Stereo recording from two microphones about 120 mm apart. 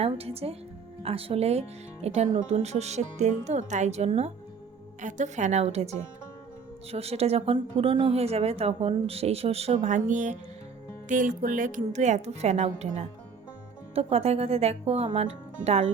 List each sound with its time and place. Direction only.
0.0 s a woman's voice: 55° right (ahead or behind)
4.9 s a woman's voice: 85° right
13.9 s a woman's voice: 60° right (ahead or behind)